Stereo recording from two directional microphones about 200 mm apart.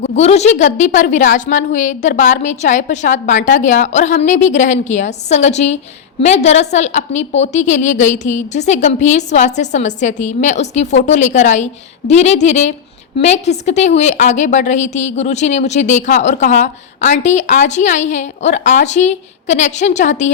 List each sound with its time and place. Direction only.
0.2 s a woman's voice: 35° left (ahead or behind)